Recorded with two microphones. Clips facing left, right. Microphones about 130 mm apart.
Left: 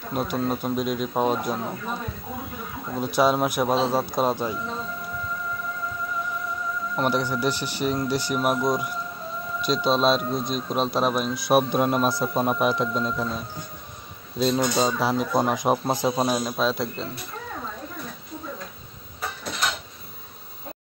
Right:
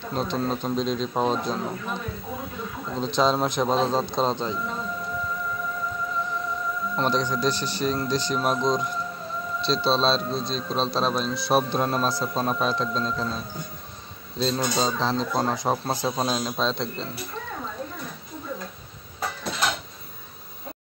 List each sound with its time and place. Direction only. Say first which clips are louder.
0.0 s a man's voice: left 1 dB; 10° left (ahead or behind)
3.0 s a man's voice: left 1 dB; 10° left (ahead or behind)
7.0 s a man's voice: left 1 dB; 10° left (ahead or behind)
14.4 s a man's voice: left 3 dB; 10° left (ahead or behind)